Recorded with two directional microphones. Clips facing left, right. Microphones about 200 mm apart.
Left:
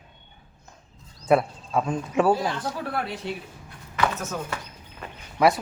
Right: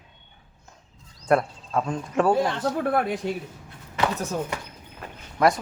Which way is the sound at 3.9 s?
30° right (ahead or behind).